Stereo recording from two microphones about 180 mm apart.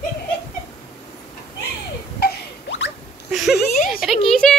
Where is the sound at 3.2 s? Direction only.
Centre (ahead or behind).